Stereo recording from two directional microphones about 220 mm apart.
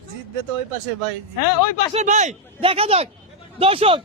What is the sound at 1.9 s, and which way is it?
Speech, 30° right (ahead or behind).